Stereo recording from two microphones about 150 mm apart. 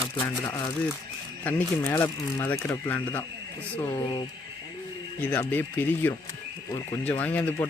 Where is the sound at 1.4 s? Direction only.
15° left (ahead or behind).